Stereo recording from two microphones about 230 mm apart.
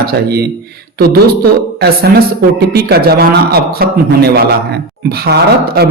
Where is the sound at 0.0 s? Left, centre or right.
Right.